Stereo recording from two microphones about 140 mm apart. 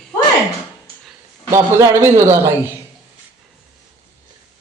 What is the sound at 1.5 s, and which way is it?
A man's voice, 20° right (ahead or behind).